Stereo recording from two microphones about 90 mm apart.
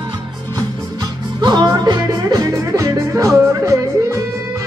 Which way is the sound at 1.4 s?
50° right (ahead or behind).